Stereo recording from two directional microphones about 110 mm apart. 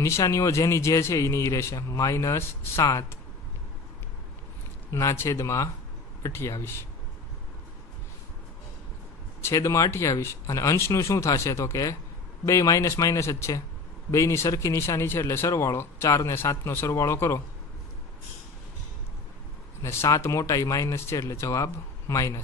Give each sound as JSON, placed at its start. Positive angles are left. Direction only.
{"t": 0.0, "sound": "speech", "side_deg": 25}
{"t": 4.9, "sound": "speech", "side_deg": 25}
{"t": 9.4, "sound": "speech", "side_deg": 30}
{"t": 19.8, "sound": "speech", "side_deg": 25}